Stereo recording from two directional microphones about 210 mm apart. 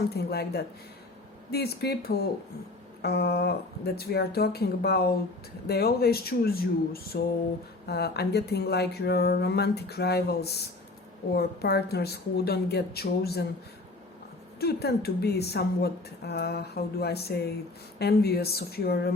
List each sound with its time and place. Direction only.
0.2 s speech: 50° left (ahead or behind)
14.6 s speech: 50° left (ahead or behind)